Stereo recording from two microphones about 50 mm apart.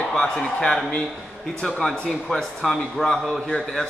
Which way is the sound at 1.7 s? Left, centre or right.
Centre.